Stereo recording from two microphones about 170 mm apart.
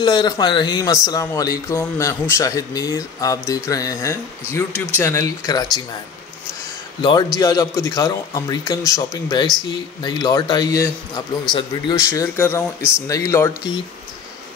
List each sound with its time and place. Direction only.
0.0 s speech: 25° left (ahead or behind)
7.0 s speech: 25° left (ahead or behind)
11.5 s speech: centre (ahead or behind)
11.9 s speech: 20° left (ahead or behind)